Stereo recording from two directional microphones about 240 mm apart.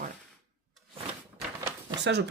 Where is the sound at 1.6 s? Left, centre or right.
Centre.